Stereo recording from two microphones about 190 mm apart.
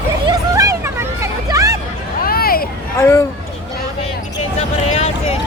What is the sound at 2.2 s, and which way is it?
Vehicle, 50° left (ahead or behind).